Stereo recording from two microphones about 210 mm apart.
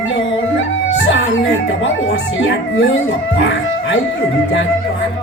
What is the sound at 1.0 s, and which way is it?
Music, 60° left (ahead or behind).